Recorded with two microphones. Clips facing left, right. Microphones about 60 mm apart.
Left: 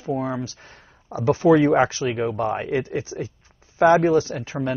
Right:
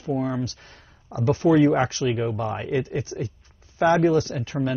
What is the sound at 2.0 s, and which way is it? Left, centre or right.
Speech, left.